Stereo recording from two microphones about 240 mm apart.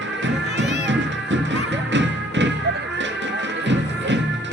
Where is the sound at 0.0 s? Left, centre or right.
Right.